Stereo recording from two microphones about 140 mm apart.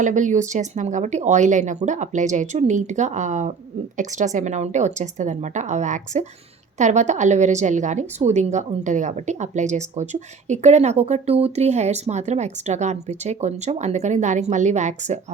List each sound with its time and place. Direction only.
0.0 s a woman's voice: 60° right (ahead or behind)